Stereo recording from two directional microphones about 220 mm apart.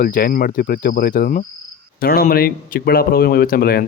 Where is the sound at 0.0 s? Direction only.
40° left (ahead or behind).